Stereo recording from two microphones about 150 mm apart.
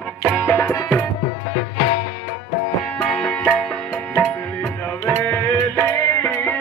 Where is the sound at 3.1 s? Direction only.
5° left (ahead or behind).